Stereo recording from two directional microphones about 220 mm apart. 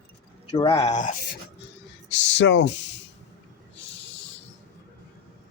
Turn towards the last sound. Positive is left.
turn(degrees=55)  # may be behind; listen again after turning